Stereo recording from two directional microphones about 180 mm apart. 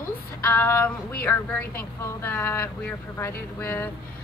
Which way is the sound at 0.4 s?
10° left (ahead or behind).